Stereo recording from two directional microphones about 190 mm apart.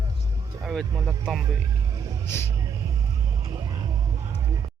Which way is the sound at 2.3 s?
15° left (ahead or behind).